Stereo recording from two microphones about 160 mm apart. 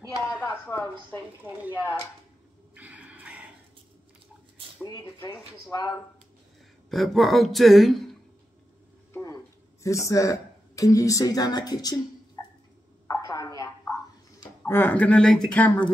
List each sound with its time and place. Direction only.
0.3 s a sound: 10° left (ahead or behind)
1.4 s speech: 10° right (ahead or behind)
2.7 s snort: 10° right (ahead or behind)
4.8 s speech: 25° left (ahead or behind)
6.9 s a man's voice: centre (ahead or behind)
9.1 s a sound: 20° left (ahead or behind)
9.8 s a woman's voice: 20° left (ahead or behind)
13.1 s a sound: 20° left (ahead or behind)
14.6 s speech: 10° left (ahead or behind)